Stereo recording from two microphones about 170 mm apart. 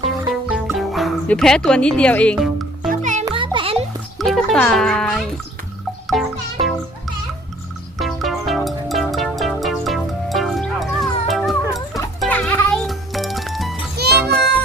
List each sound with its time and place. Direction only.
0.5 s music: centre (ahead or behind)
2.9 s music: 45° right (ahead or behind)
3.2 s music: 30° right (ahead or behind)
4.2 s speech: centre (ahead or behind)
6.1 s music: centre (ahead or behind)
7.9 s music: centre (ahead or behind)
12.3 s music: 10° left (ahead or behind)
13.9 s music: 70° right (ahead or behind)